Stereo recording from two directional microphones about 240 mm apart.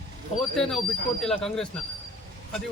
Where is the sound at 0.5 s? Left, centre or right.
Centre.